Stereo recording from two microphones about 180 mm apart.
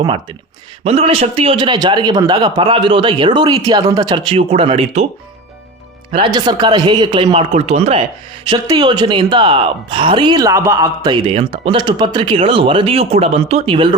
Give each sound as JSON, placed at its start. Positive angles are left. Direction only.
{"t": 0.9, "sound": "speech", "side_deg": -35}
{"t": 6.1, "sound": "speech", "side_deg": -25}